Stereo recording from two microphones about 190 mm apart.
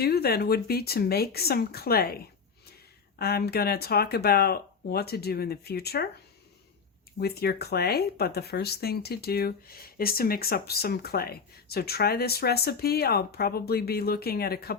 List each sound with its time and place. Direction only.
0.0 s speech: 55° left (ahead or behind)
3.2 s speech: 55° left (ahead or behind)
7.2 s speech: 55° left (ahead or behind)